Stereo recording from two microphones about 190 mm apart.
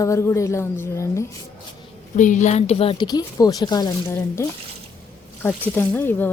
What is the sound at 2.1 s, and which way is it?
Speech, 40° left (ahead or behind).